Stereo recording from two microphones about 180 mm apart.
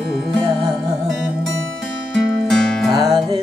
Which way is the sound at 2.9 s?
20° right (ahead or behind).